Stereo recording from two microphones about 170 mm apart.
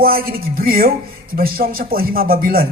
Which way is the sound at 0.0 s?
60° right (ahead or behind).